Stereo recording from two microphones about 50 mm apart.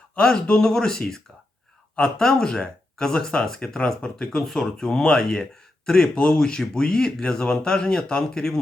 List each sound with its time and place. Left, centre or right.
0.4 s speech: centre
4.4 s speech: centre